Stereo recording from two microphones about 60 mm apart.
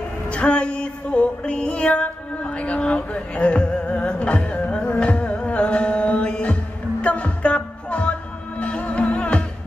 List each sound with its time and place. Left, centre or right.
0.3 s music: centre